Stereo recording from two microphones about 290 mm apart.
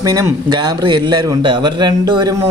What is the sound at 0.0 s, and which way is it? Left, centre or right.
A man's voice, centre.